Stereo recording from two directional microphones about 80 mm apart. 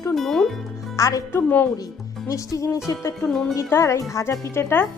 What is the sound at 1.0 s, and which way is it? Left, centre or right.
Speech, left.